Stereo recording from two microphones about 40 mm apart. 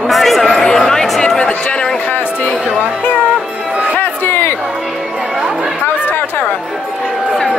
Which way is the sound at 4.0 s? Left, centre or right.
Left.